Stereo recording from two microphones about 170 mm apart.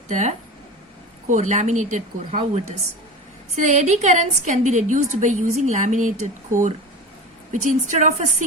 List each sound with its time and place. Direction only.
0.1 s a woman's voice: 45° right (ahead or behind)
3.5 s a woman's voice: 45° right (ahead or behind)